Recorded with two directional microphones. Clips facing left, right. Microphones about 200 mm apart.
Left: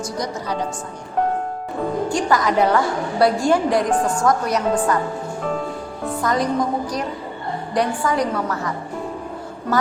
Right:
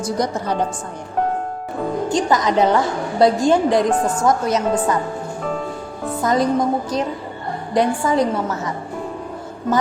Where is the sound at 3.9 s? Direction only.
5° right (ahead or behind).